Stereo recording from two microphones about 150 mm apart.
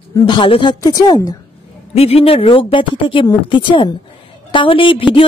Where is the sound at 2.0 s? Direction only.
40° left (ahead or behind).